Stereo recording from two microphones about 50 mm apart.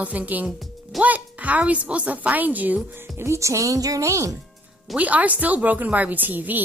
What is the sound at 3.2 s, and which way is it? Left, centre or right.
Speech, right.